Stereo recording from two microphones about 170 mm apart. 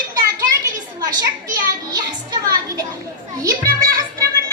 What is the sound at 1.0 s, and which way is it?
Speech, 25° right (ahead or behind).